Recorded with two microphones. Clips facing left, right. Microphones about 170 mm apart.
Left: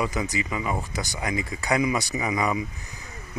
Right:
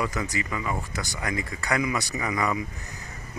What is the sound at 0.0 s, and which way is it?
Speech, 20° left (ahead or behind).